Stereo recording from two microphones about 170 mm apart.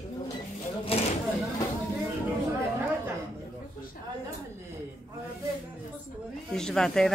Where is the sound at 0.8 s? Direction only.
35° left (ahead or behind).